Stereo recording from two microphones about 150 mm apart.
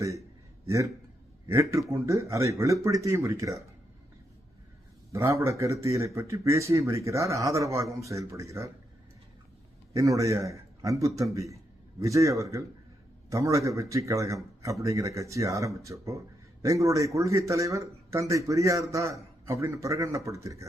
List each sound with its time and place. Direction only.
1.9 s speech: 20° right (ahead or behind)
5.1 s speech: 20° right (ahead or behind)
9.9 s a man's voice: 20° right (ahead or behind)